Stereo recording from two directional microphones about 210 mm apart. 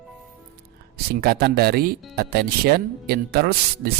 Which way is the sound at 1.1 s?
50° right (ahead or behind).